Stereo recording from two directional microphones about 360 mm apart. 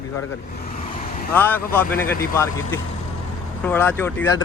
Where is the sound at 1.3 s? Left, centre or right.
Centre.